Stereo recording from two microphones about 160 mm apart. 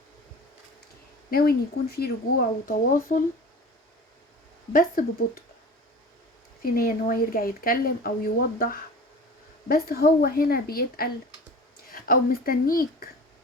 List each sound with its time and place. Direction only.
1.3 s a woman's voice: 70° left (ahead or behind)
2.6 s speech: 60° left (ahead or behind)
4.7 s speech: 60° left (ahead or behind)
6.6 s a woman's voice: 65° left (ahead or behind)